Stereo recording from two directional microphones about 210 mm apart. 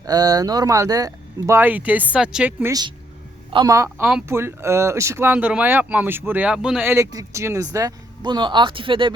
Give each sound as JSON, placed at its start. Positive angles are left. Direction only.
{"t": 0.0, "sound": "speech", "side_deg": -20}